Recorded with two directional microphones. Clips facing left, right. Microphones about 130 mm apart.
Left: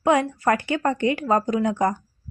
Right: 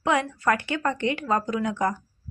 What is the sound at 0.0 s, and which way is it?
Speech, 30° left (ahead or behind).